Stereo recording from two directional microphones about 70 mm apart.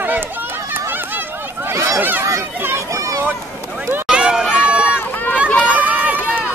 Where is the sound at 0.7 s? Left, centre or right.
Right.